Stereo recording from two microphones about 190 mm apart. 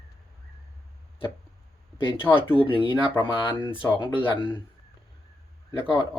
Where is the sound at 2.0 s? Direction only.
25° left (ahead or behind).